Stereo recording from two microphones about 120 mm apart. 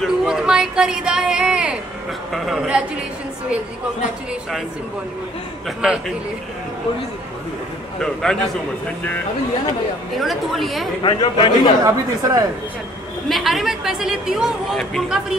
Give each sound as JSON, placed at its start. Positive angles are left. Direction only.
{"t": 0.0, "sound": "speech", "side_deg": -5}
{"t": 5.8, "sound": "speech", "side_deg": -5}
{"t": 8.0, "sound": "speech", "side_deg": 5}
{"t": 10.1, "sound": "speech", "side_deg": 0}
{"t": 11.0, "sound": "a man's voice", "side_deg": 40}
{"t": 11.8, "sound": "speech", "side_deg": -30}
{"t": 13.3, "sound": "speech", "side_deg": 0}